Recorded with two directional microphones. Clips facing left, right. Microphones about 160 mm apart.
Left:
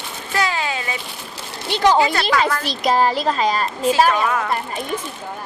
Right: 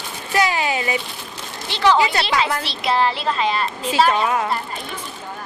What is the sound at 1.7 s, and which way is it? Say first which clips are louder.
A woman's voice: left 1 dB; 45° left (ahead or behind).